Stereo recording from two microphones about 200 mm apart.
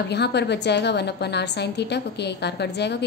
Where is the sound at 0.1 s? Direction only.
55° left (ahead or behind).